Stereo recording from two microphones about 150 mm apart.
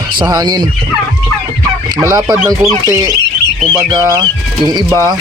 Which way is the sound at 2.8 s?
25° right (ahead or behind).